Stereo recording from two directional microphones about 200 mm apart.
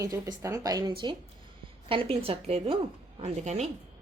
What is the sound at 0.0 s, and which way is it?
A woman's voice, 15° right (ahead or behind).